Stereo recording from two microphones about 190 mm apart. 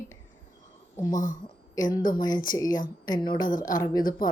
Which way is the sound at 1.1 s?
45° left (ahead or behind).